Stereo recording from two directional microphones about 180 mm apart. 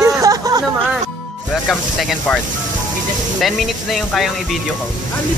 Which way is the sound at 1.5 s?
Centre (ahead or behind).